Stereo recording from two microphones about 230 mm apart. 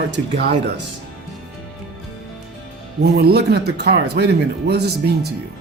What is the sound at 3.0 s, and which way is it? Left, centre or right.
Speech, right.